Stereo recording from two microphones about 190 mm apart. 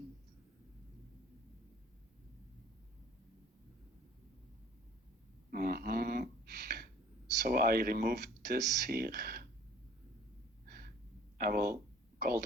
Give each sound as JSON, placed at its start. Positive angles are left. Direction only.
{"t": 5.5, "sound": "a sound", "side_deg": -50}
{"t": 7.4, "sound": "speech", "side_deg": -50}
{"t": 11.3, "sound": "speech", "side_deg": -50}